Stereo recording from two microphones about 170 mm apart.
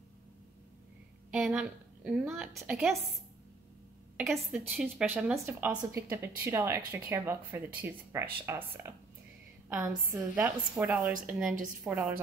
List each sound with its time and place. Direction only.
1.3 s a woman's voice: 5° right (ahead or behind)
4.2 s a woman's voice: centre (ahead or behind)
10.1 s a woman's voice: 10° right (ahead or behind)